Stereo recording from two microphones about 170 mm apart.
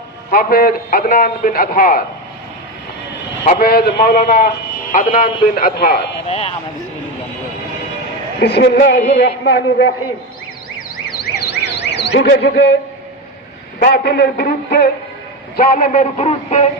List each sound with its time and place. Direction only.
0.3 s a man's voice: 60° left (ahead or behind)
3.6 s a man's voice: 60° left (ahead or behind)
6.2 s speech: 35° left (ahead or behind)
8.4 s a man's voice: 75° left (ahead or behind)
11.2 s alarm: 75° left (ahead or behind)
13.7 s a man's voice: 75° left (ahead or behind)
15.5 s speech: 55° left (ahead or behind)